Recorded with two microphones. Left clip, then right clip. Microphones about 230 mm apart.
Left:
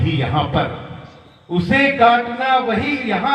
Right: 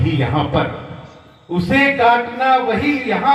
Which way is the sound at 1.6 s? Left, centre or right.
Left.